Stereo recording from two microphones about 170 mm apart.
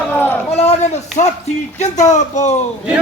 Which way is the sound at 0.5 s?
40° left (ahead or behind).